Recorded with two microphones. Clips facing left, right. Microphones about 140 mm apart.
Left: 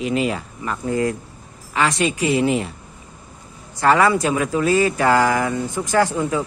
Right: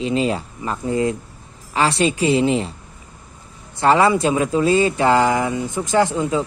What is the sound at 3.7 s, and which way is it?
Speech, 25° right (ahead or behind).